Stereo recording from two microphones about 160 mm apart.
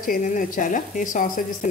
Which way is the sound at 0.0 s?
55° left (ahead or behind).